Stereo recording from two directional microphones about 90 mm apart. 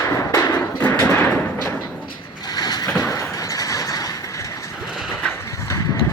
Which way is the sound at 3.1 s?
40° left (ahead or behind).